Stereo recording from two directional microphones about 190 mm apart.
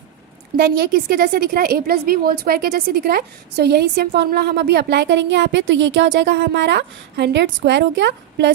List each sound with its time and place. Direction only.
0.5 s a woman's voice: 55° right (ahead or behind)